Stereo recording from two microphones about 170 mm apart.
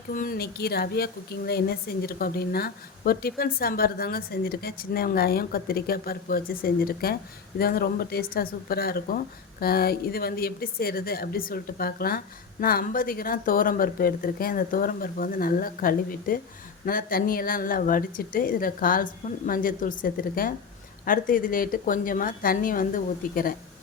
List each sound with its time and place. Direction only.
0.1 s speech: 55° left (ahead or behind)